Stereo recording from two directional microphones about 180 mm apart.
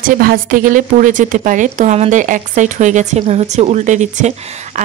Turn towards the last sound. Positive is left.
turn(degrees=-40)  # may be behind; listen again after turning